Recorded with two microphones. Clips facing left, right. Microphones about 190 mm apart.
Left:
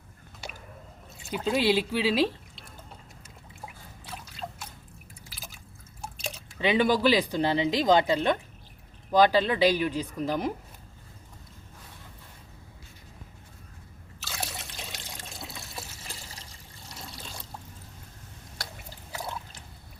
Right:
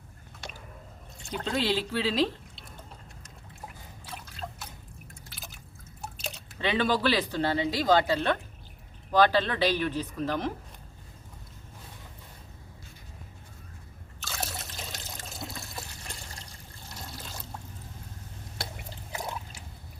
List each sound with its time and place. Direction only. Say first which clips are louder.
1.2 s speech: left 4 dB; 5° left (ahead or behind)
5.3 s drip: even; centre (ahead or behind)
6.6 s speech: left 3 dB; 15° left (ahead or behind)
14.2 s trickle: right 1 dB; centre (ahead or behind)
18.5 s water: right 3 dB; 25° right (ahead or behind)